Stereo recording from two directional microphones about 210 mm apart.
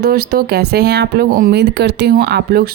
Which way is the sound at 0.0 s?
45° right (ahead or behind).